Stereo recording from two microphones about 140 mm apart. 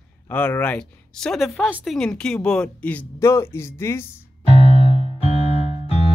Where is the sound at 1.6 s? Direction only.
10° right (ahead or behind).